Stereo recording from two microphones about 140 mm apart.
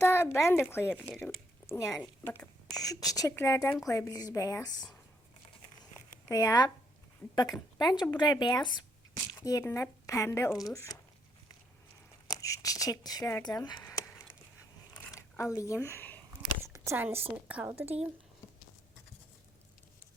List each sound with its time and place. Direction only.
0.0 s a woman's voice: 15° left (ahead or behind)
6.2 s a woman's voice: 25° left (ahead or behind)
12.3 s a woman's voice: 25° left (ahead or behind)
15.0 s a sound: 20° left (ahead or behind)
16.6 s a woman's voice: 20° right (ahead or behind)